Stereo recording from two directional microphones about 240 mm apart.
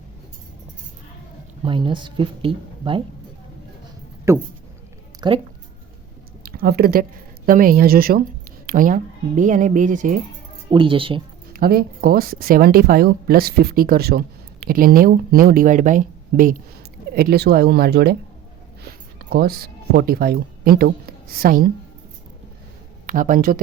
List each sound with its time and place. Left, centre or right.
1.6 s speech: right
4.3 s speech: centre
6.4 s a sound: right
7.4 s speech: right
10.7 s speech: right
11.5 s speech: right
23.0 s speech: right